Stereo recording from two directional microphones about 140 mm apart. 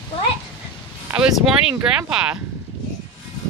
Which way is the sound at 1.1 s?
5° right (ahead or behind).